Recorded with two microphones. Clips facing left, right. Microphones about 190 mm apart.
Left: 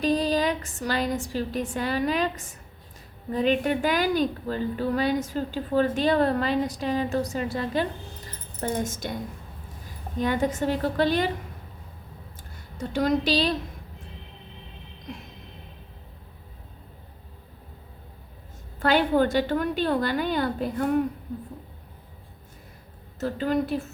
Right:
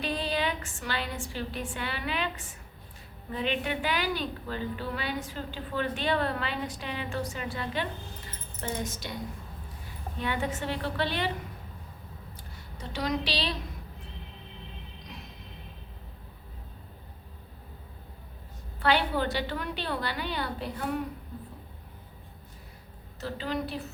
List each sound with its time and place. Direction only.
0.0 s a woman's voice: 40° left (ahead or behind)
10.2 s a woman's voice: 40° left (ahead or behind)
12.7 s a woman's voice: 50° left (ahead or behind)
18.8 s a woman's voice: 45° left (ahead or behind)
23.2 s a woman's voice: 50° left (ahead or behind)